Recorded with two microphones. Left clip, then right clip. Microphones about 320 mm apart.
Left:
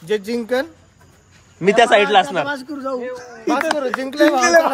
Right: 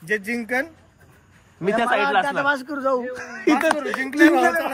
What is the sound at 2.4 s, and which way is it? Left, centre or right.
A man's voice, right.